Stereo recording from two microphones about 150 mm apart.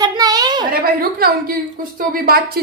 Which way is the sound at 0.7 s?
85° right.